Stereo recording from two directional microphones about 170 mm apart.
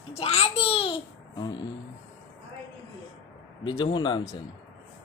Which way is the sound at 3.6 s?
30° left (ahead or behind).